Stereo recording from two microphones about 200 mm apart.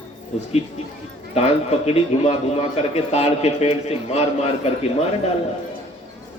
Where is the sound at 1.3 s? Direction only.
30° left (ahead or behind).